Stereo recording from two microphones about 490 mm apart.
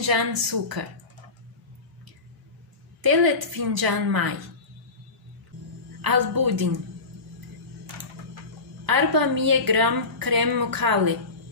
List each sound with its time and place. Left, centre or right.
0.0 s a woman's voice: right
3.0 s a woman's voice: right
5.9 s a woman's voice: right
8.8 s a woman's voice: right